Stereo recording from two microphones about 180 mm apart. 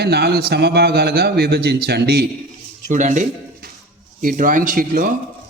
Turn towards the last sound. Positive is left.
turn(degrees=-50)  # may be behind; listen again after turning